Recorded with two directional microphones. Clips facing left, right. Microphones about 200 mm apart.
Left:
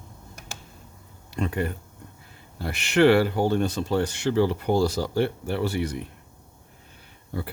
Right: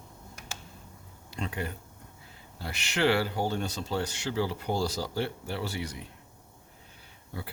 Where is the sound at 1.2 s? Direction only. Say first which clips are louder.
Left 8 dB; 55° left (ahead or behind).